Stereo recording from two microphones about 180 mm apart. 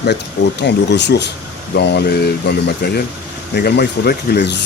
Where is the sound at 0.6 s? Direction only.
70° left (ahead or behind).